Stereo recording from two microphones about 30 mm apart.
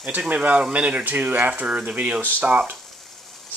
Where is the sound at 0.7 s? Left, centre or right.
Right.